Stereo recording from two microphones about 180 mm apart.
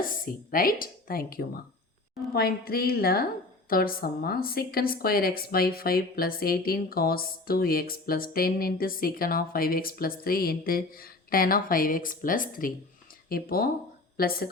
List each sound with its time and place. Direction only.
0.5 s a woman's voice: 50° left (ahead or behind)